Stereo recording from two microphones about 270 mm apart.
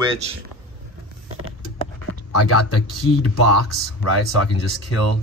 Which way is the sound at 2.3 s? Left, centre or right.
Left.